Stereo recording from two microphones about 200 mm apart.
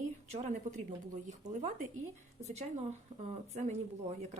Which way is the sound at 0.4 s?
40° right (ahead or behind).